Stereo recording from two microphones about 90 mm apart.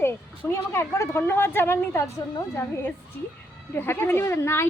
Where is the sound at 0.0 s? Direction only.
25° left (ahead or behind).